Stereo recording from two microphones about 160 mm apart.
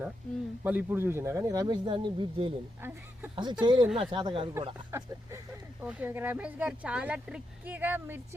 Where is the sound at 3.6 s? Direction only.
25° right (ahead or behind).